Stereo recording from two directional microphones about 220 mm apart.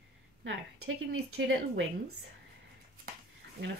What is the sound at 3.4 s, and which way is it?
Dog, 50° right (ahead or behind).